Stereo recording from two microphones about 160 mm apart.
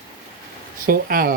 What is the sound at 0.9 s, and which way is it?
Speech, 65° right (ahead or behind).